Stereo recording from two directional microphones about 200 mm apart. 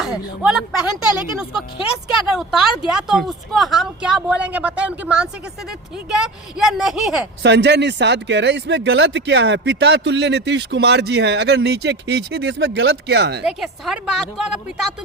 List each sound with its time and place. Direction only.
0.0 s speech: 5° right (ahead or behind)
2.4 s speech: centre (ahead or behind)
7.4 s speech: 60° right (ahead or behind)
13.4 s speech: 5° right (ahead or behind)